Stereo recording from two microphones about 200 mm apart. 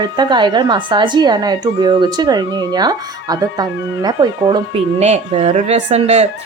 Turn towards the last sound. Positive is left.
turn(degrees=-35)  # may be behind; listen again after turning